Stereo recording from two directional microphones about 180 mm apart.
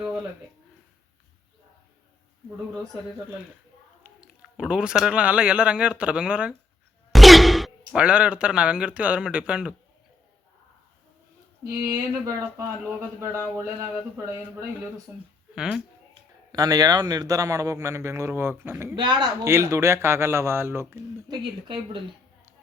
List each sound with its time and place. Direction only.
4.0 s speech: 5° right (ahead or behind)
11.6 s a man's voice: 20° right (ahead or behind)
15.5 s speech: 5° right (ahead or behind)
16.5 s a man's voice: 20° right (ahead or behind)
18.9 s a man's voice: 25° right (ahead or behind)